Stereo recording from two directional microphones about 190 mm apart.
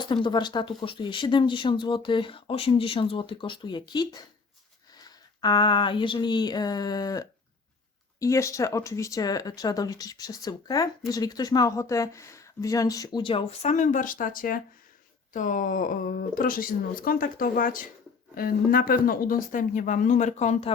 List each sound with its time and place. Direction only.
0.0 s speech: 25° left (ahead or behind)